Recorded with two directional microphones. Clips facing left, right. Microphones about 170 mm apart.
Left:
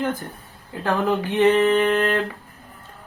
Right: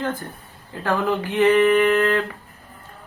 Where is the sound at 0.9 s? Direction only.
20° left (ahead or behind).